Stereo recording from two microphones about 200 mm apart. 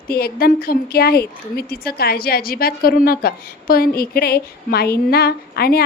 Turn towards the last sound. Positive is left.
turn(degrees=50)  # may be behind; listen again after turning